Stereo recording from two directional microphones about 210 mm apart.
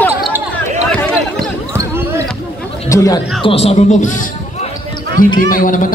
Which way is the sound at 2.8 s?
15° left (ahead or behind).